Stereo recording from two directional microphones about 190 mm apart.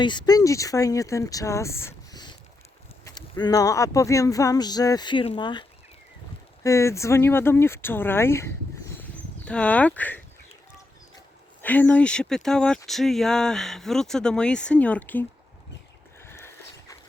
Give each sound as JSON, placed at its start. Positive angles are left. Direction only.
{"t": 0.0, "sound": "speech", "side_deg": 25}
{"t": 11.6, "sound": "speech", "side_deg": 10}
{"t": 16.2, "sound": "a sound", "side_deg": 15}